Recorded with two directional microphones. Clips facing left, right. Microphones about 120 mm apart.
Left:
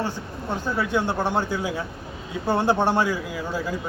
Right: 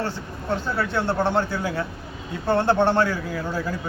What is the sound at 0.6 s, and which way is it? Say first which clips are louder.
A man's voice: left 3 dB; 15° left (ahead or behind).